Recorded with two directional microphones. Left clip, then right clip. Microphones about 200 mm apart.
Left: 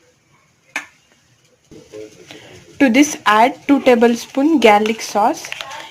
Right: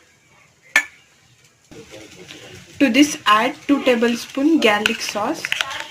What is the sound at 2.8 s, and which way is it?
Speech, 25° left (ahead or behind).